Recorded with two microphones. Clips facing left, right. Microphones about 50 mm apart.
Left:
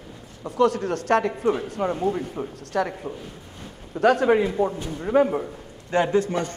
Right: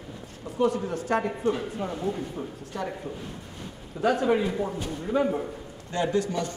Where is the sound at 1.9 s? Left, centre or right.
Left.